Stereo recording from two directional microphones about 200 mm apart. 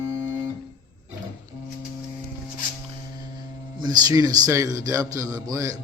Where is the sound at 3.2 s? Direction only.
20° right (ahead or behind).